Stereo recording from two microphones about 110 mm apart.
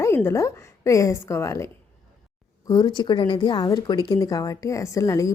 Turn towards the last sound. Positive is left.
turn(degrees=30)  # may be behind; listen again after turning